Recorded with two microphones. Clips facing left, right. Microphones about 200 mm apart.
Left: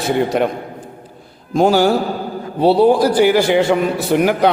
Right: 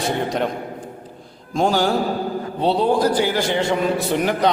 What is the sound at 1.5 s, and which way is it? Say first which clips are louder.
A man's voice: left 6 dB; 5° left (ahead or behind).